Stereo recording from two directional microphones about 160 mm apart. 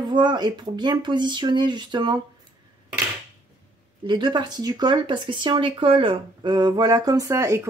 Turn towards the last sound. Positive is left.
turn(degrees=-20)  # may be behind; listen again after turning